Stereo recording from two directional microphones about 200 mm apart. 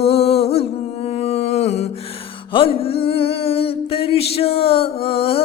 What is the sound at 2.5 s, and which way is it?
Music, 25° left (ahead or behind).